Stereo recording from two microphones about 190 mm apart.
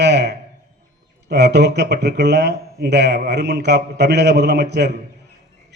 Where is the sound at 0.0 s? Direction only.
60° right (ahead or behind).